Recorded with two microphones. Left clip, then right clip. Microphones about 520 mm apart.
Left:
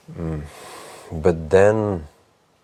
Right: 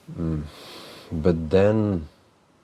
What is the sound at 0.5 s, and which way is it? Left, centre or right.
Speech, left.